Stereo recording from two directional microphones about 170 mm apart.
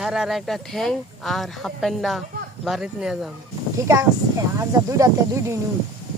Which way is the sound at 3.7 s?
20° right (ahead or behind).